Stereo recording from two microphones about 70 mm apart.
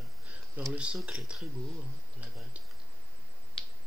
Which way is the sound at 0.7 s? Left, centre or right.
Centre.